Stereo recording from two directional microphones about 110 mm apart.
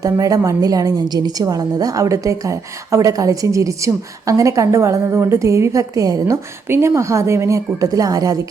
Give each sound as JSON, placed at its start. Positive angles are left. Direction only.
{"t": 0.0, "sound": "a woman's voice", "side_deg": -30}